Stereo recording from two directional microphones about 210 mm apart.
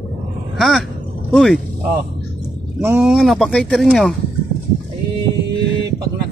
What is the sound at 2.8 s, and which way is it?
Speech, 5° right (ahead or behind).